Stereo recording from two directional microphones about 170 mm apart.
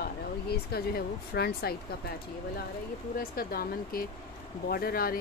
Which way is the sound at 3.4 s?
60° left (ahead or behind).